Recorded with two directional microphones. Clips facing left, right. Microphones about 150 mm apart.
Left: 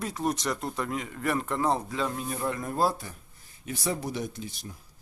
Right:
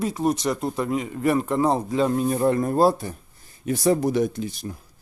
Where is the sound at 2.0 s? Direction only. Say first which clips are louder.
Right 11 dB; 40° right (ahead or behind).